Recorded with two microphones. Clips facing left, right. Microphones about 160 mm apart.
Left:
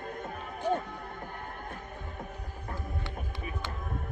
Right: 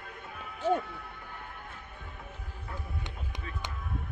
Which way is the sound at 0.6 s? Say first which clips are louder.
Right 2 dB; 15° left (ahead or behind).